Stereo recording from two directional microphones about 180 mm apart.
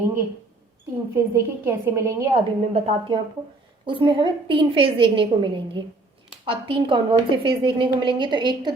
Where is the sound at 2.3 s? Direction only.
30° right (ahead or behind).